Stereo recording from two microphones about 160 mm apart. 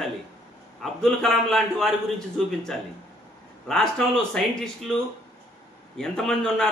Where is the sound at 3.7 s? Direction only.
5° left (ahead or behind).